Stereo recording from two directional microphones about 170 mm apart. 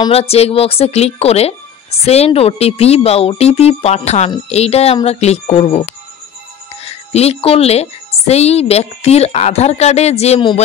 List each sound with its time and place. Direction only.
0.1 s speech: 35° left (ahead or behind)